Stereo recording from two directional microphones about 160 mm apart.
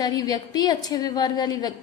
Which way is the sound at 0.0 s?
25° left (ahead or behind).